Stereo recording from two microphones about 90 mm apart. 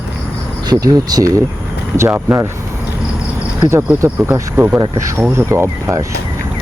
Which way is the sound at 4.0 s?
30° right (ahead or behind).